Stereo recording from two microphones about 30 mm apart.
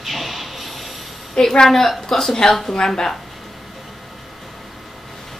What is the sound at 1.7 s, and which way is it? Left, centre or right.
Speech, centre.